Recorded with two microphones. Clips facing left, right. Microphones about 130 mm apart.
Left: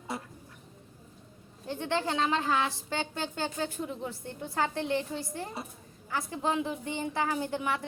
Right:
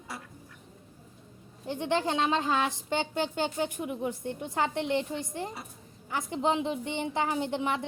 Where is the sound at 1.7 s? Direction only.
15° right (ahead or behind).